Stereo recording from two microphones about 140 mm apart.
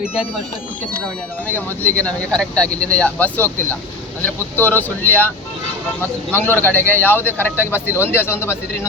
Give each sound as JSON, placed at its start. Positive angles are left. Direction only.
{"t": 1.5, "sound": "speech", "side_deg": 10}